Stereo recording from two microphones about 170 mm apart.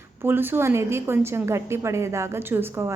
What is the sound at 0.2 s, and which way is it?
A woman's voice, 10° right (ahead or behind).